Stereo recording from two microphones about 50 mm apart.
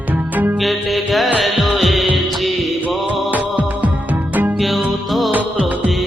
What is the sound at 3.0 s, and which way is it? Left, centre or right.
Music, right.